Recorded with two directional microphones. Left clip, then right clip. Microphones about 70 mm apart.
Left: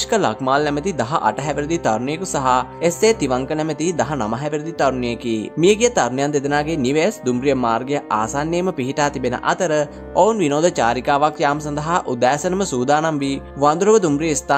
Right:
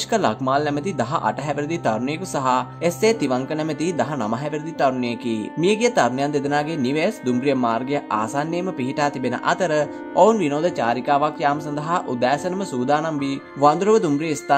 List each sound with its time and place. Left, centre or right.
0.1 s a man's voice: left
8.5 s speech: left
9.5 s a man's voice: left
13.6 s a man's voice: left